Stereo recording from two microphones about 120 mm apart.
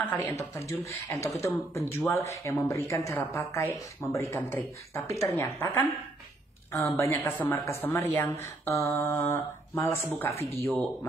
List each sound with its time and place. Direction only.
0.1 s speech: 20° left (ahead or behind)
7.0 s speech: 20° left (ahead or behind)